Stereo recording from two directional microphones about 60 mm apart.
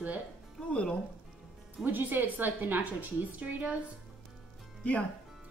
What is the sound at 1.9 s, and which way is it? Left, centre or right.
A woman's voice, right.